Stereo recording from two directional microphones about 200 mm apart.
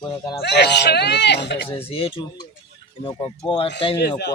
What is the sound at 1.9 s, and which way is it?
Speech, 25° left (ahead or behind).